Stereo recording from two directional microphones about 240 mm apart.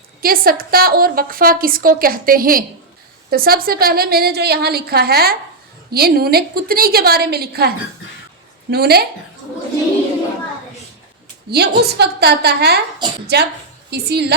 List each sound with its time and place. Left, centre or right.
0.2 s a woman's voice: right
8.7 s a woman's voice: right
11.5 s a woman's voice: right